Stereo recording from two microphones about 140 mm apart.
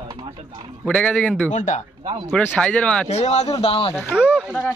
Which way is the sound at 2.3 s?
10° left (ahead or behind).